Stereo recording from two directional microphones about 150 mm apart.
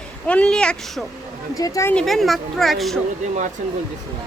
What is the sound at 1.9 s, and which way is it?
Speech, centre (ahead or behind).